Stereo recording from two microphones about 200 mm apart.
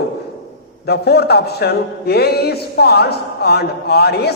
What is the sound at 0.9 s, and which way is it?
A man's voice, 55° left (ahead or behind).